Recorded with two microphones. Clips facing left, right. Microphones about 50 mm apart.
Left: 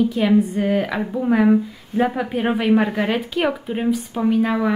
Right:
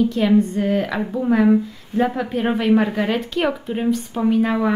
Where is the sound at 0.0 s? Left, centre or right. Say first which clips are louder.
Even; centre.